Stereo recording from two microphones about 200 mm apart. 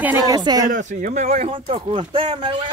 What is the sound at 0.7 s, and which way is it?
Speech, 40° right (ahead or behind).